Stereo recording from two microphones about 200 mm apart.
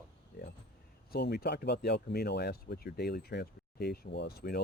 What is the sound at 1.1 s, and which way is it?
Speech, 50° left (ahead or behind).